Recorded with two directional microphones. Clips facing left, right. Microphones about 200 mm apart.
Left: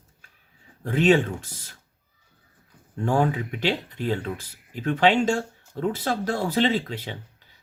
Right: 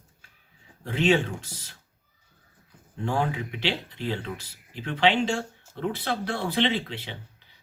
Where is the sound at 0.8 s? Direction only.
45° left (ahead or behind).